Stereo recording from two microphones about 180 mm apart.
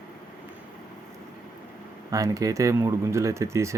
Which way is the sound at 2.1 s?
20° right (ahead or behind).